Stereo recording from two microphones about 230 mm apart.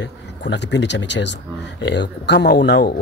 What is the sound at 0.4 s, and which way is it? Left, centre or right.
Speech, left.